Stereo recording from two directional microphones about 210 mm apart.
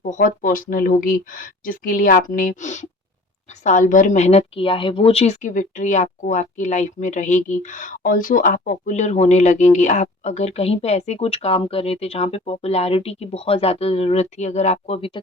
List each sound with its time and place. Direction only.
0.0 s speech: 35° left (ahead or behind)